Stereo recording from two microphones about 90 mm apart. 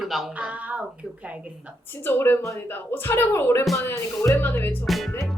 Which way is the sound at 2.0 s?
25° left (ahead or behind).